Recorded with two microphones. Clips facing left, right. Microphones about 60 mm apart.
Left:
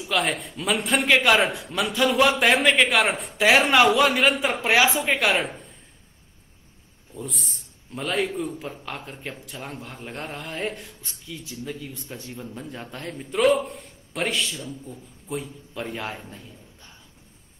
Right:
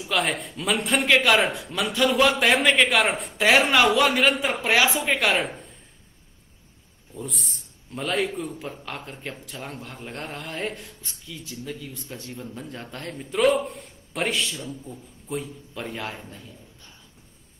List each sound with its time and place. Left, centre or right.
0.0 s a man's voice: centre
7.2 s a man's voice: centre